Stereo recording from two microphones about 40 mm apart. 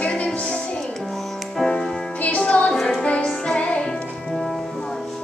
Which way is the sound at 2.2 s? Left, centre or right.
Left.